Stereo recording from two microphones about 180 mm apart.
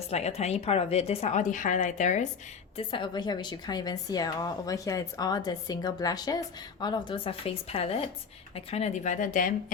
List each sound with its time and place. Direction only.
0.1 s speech: 35° left (ahead or behind)
2.7 s a woman's voice: 25° left (ahead or behind); by 9.5 s 45° left (ahead or behind)